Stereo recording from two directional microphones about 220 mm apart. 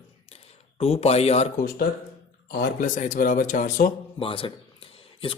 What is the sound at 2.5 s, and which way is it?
A man's voice, 40° left (ahead or behind).